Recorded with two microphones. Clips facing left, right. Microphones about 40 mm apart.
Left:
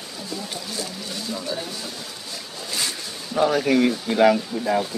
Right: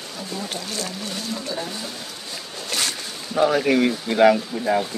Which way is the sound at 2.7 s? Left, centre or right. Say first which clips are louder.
Right 2 dB; right.